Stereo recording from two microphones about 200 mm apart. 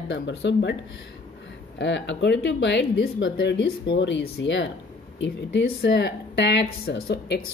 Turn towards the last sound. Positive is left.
turn(degrees=55)  # may be behind; listen again after turning